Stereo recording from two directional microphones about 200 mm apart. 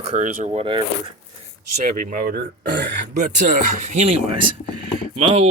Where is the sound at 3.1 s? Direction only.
35° right (ahead or behind).